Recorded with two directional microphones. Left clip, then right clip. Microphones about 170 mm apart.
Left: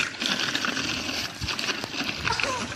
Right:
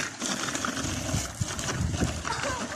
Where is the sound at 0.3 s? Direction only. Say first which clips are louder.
Left 4 dB; 40° right (ahead or behind).